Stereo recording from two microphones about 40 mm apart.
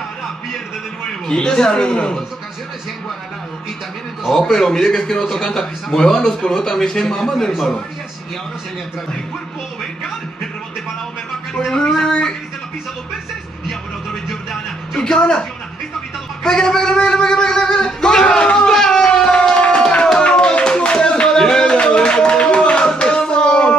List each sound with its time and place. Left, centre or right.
1.2 s a man's voice: centre
4.3 s a man's voice: centre
12.0 s a man's voice: left
15.0 s a man's voice: left
16.4 s speech: centre
18.4 s a sound: left
18.7 s a sound: centre